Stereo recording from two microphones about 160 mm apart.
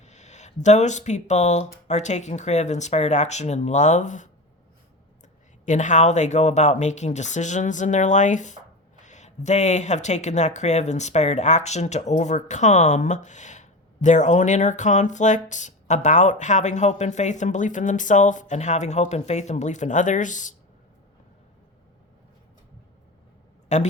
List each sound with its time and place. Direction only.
0.0 s speech: 45° left (ahead or behind)
5.6 s speech: 50° left (ahead or behind)
23.6 s a man's voice: 45° left (ahead or behind)